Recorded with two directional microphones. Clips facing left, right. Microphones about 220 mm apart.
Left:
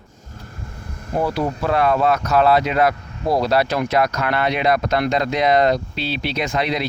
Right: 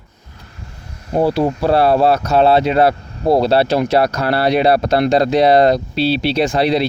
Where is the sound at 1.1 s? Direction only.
30° right (ahead or behind).